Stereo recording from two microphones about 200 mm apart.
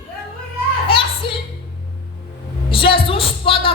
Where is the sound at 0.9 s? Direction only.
25° left (ahead or behind).